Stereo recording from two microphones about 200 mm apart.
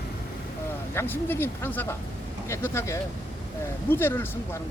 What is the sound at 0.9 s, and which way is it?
Speech, 10° left (ahead or behind).